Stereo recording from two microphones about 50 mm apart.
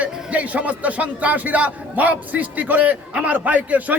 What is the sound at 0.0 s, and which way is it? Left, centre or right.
A man's voice, right.